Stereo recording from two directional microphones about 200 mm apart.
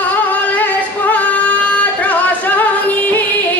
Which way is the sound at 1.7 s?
5° left (ahead or behind).